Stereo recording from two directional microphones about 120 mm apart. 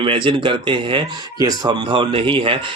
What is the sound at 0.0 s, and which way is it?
Speech, 45° right (ahead or behind).